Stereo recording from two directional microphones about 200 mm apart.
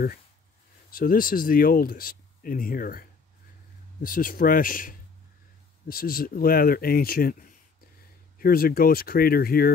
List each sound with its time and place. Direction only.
0.8 s speech: 45° left (ahead or behind)